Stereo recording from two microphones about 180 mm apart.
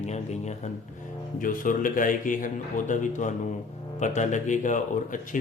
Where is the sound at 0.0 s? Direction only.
40° left (ahead or behind).